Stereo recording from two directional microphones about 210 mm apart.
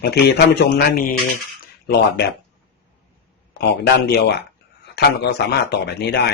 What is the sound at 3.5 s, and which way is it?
Speech, 50° left (ahead or behind).